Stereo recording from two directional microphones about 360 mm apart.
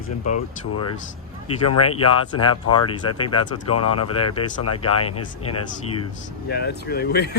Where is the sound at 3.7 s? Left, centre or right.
Left.